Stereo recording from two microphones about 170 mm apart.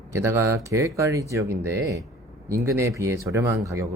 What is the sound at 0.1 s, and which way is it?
Speech, 15° right (ahead or behind).